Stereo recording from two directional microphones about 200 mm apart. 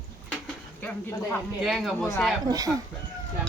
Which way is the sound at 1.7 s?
Centre (ahead or behind).